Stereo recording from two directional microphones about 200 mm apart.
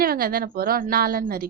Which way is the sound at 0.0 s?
50° right (ahead or behind).